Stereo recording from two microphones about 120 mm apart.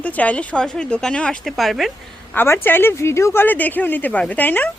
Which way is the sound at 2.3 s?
20° left (ahead or behind).